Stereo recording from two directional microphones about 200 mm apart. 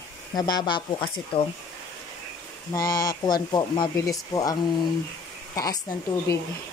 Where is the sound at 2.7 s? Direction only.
20° left (ahead or behind).